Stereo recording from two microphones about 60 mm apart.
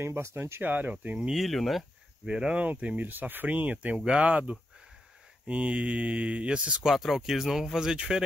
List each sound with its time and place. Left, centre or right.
0.0 s speech: right
0.6 s speech: right
1.3 s speech: centre
2.2 s speech: centre
6.9 s speech: centre